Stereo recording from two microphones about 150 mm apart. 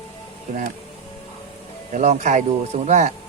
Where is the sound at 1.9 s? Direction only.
50° right (ahead or behind).